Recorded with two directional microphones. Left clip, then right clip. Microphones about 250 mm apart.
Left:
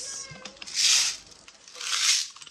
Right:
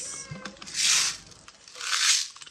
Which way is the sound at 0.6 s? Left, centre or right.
Centre.